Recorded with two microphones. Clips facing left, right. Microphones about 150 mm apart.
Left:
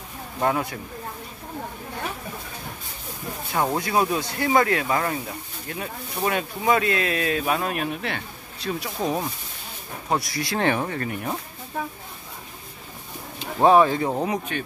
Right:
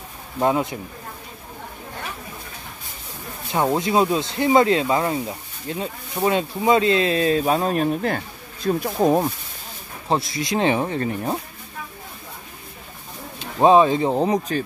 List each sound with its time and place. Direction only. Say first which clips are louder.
0.4 s speech: right 4 dB; 20° right (ahead or behind)
3.4 s speech: right 4 dB; 20° right (ahead or behind); by 9.2 s 50° right (ahead or behind)
10.0 s speech: right 3 dB; 25° right (ahead or behind)
13.6 s speech: right 2 dB; 20° right (ahead or behind)